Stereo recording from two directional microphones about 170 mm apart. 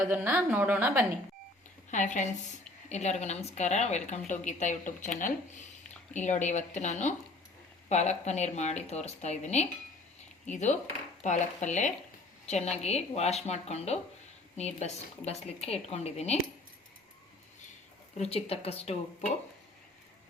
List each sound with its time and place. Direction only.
0.1 s a woman's voice: 10° right (ahead or behind)
1.9 s a woman's voice: 45° left (ahead or behind)
18.2 s a woman's voice: 35° left (ahead or behind)